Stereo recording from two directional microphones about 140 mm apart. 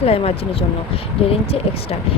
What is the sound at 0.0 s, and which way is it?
Speech, 45° left (ahead or behind).